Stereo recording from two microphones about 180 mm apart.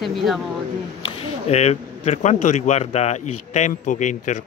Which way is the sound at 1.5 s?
35° left (ahead or behind).